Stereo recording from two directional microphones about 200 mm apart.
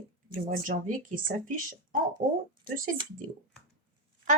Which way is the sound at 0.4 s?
45° right (ahead or behind).